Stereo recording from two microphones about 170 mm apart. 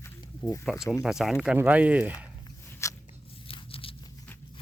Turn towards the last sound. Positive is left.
turn(degrees=35)  # may be behind; listen again after turning